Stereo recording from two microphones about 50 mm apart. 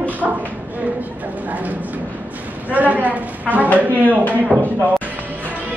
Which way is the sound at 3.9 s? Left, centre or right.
Left.